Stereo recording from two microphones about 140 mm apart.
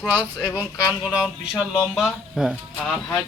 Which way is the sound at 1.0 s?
5° right (ahead or behind).